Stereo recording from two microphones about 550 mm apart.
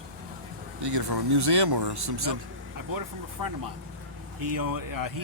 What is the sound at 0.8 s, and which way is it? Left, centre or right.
Speech, right.